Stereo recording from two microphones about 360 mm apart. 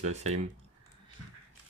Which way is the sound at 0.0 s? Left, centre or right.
Centre.